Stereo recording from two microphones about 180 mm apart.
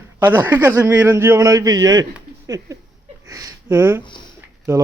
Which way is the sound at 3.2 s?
20° right (ahead or behind).